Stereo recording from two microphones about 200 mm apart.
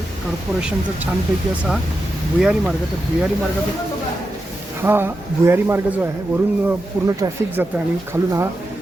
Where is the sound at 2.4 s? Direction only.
5° right (ahead or behind).